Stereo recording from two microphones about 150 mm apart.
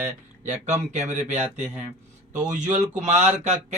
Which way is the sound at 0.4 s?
50° right (ahead or behind).